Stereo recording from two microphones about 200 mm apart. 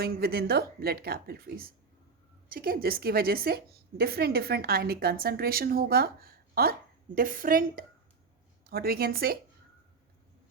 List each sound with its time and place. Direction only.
0.0 s a woman's voice: 50° right (ahead or behind)